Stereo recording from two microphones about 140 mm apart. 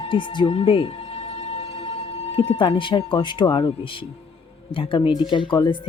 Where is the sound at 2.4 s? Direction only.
40° left (ahead or behind).